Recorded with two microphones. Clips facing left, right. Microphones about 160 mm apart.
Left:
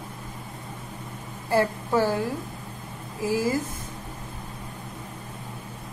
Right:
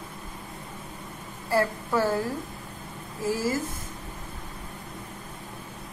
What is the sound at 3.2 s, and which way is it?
Speech, 15° left (ahead or behind).